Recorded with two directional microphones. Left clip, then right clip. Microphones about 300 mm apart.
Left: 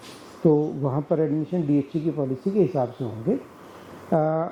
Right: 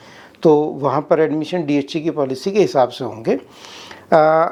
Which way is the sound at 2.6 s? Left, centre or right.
Centre.